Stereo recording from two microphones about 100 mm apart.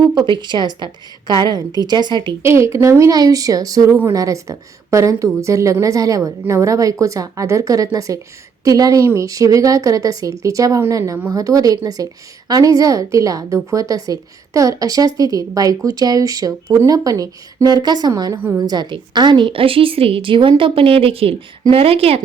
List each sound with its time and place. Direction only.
0.1 s a woman's voice: 45° right (ahead or behind)
2.4 s a woman's voice: 25° right (ahead or behind); by 18.1 s 45° right (ahead or behind)
18.3 s a woman's voice: 20° right (ahead or behind)
18.6 s a woman's voice: 45° right (ahead or behind); by 22.2 s 80° right